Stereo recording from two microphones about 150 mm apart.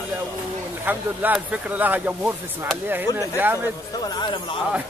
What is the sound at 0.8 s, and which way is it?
Speech, 10° right (ahead or behind).